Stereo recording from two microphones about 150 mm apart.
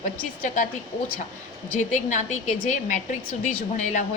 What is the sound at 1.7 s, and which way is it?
A woman's voice, 55° left (ahead or behind).